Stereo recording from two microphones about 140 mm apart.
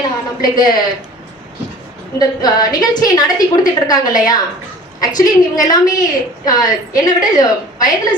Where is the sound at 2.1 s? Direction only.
30° left (ahead or behind).